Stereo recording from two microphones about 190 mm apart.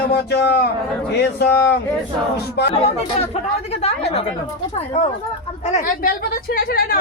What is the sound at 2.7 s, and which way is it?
Speech, 30° left (ahead or behind).